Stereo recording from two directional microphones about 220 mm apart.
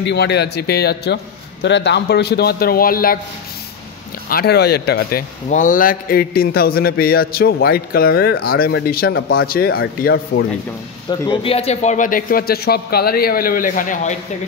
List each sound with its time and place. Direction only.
0.0 s a man's voice: 50° left (ahead or behind)
4.3 s a man's voice: 45° left (ahead or behind)
5.5 s a man's voice: 35° left (ahead or behind)
11.1 s a man's voice: 20° left (ahead or behind)